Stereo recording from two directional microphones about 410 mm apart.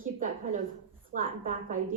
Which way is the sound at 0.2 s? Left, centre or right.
Centre.